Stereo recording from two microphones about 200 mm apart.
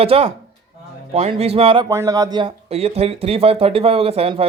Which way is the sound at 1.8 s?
15° right (ahead or behind).